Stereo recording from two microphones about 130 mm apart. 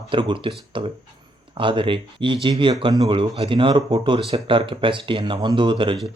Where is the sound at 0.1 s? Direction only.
40° right (ahead or behind).